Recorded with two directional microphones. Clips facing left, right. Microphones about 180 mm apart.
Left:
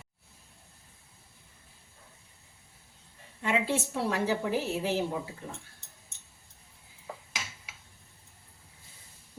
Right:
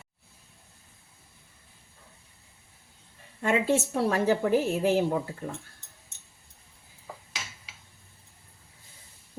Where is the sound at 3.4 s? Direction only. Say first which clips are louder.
Right 5 dB; 45° right (ahead or behind).